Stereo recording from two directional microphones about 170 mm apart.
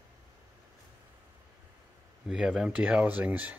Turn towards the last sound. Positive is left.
turn(degrees=-10)  # may be behind; listen again after turning